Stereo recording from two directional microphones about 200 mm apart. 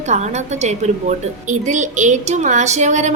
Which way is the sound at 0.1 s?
35° right (ahead or behind).